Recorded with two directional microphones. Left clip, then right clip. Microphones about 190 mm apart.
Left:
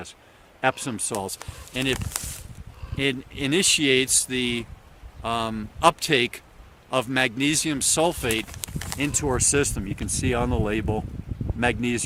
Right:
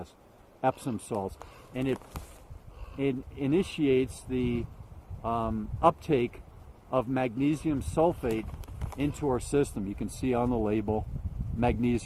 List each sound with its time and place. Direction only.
1.1 s speech: 10° left (ahead or behind)
3.0 s speech: 5° left (ahead or behind); by 12.0 s 15° right (ahead or behind)